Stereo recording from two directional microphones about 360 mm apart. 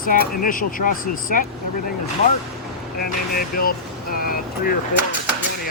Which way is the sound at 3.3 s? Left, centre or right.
Left.